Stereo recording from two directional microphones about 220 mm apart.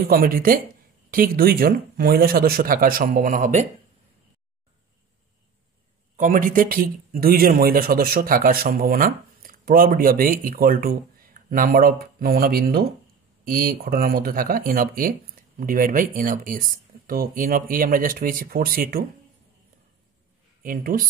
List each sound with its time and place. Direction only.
0.1 s speech: 40° right (ahead or behind)
6.1 s speech: 35° right (ahead or behind)
20.6 s speech: 40° right (ahead or behind)